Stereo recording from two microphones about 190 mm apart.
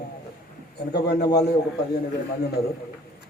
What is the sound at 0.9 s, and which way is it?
Speech, 60° left (ahead or behind).